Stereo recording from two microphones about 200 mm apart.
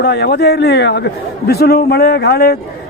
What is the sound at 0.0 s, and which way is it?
A man's voice, 55° left (ahead or behind).